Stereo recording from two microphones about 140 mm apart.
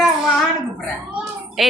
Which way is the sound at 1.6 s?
Centre (ahead or behind).